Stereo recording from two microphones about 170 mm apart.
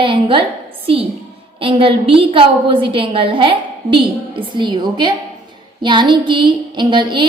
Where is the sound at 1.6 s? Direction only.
30° right (ahead or behind).